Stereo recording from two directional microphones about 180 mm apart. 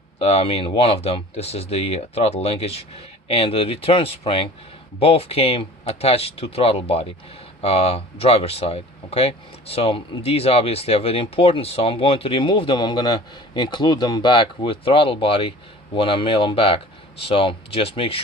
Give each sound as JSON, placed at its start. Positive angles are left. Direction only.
{"t": 0.2, "sound": "speech", "side_deg": 30}